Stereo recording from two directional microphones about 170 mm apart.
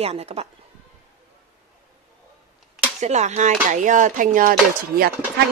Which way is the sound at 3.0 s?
40° right (ahead or behind).